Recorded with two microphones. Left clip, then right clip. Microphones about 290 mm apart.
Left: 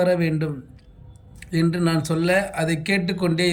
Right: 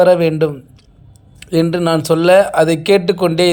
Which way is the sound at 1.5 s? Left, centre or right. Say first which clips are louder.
Right 9 dB; centre.